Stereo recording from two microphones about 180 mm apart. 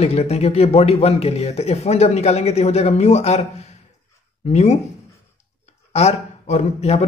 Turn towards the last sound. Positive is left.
turn(degrees=35)  # may be behind; listen again after turning